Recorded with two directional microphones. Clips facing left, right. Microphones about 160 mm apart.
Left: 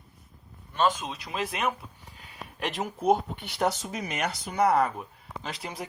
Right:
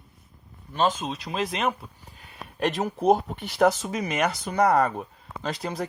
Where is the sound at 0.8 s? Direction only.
25° right (ahead or behind).